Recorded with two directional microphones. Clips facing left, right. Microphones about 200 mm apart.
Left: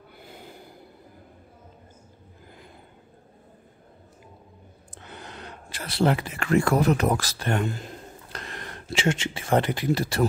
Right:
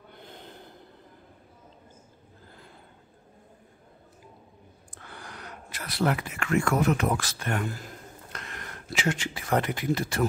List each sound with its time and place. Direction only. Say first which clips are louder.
0.1 s gasp: left 1 dB; 10° left (ahead or behind)
4.9 s speech: left 3 dB; 20° left (ahead or behind)